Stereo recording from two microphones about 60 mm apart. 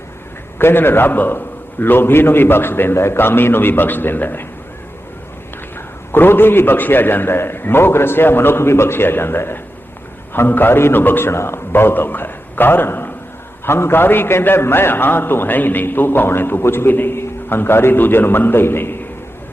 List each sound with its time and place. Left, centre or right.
0.6 s a man's voice: left
6.1 s a man's voice: left